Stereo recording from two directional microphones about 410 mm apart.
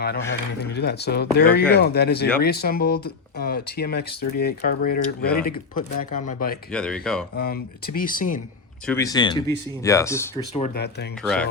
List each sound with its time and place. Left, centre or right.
0.6 s speech: left
6.7 s speech: centre
7.3 s speech: left
8.9 s speech: centre